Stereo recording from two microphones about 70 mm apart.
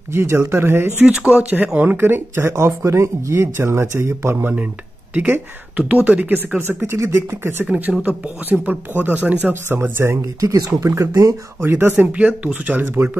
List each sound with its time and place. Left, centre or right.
0.1 s speech: right
1.0 s speech: centre; by 4.5 s right
5.1 s speech: right
6.8 s speech: right
7.6 s speech: centre; by 10.1 s right
10.4 s speech: right
11.6 s speech: right